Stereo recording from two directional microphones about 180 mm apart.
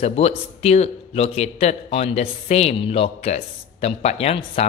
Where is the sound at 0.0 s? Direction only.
35° left (ahead or behind).